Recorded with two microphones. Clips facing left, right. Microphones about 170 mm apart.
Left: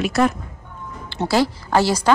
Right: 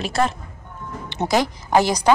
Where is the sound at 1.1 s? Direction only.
20° right (ahead or behind).